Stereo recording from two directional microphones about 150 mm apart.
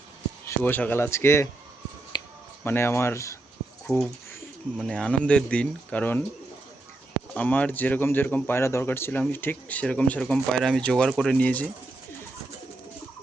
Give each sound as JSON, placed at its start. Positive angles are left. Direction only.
{"t": 0.4, "sound": "speech", "side_deg": 15}
{"t": 2.1, "sound": "a sound", "side_deg": 30}
{"t": 2.6, "sound": "speech", "side_deg": 15}
{"t": 4.8, "sound": "speech", "side_deg": 5}
{"t": 7.3, "sound": "speech", "side_deg": 10}